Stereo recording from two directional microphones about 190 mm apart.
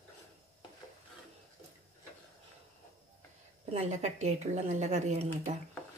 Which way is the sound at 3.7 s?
35° right (ahead or behind).